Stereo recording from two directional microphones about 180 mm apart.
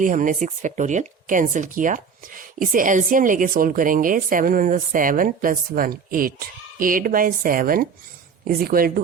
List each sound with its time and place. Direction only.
0.0 s speech: 45° right (ahead or behind)